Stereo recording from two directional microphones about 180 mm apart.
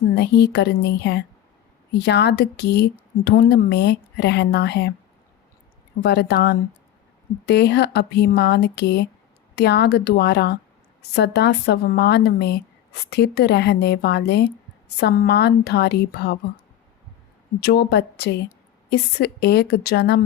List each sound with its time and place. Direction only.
0.2 s a woman's voice: 65° left (ahead or behind)
6.0 s a woman's voice: 70° left (ahead or behind)
17.6 s a woman's voice: 65° left (ahead or behind)